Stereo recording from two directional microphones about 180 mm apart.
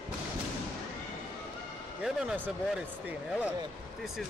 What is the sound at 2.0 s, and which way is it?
Speech, centre (ahead or behind).